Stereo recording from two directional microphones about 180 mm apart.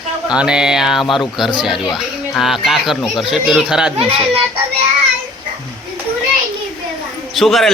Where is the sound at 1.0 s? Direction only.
25° left (ahead or behind).